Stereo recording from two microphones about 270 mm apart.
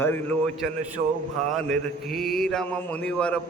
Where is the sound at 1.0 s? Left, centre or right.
Right.